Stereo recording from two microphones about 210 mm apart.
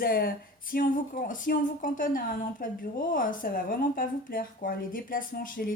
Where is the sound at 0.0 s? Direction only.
45° left (ahead or behind).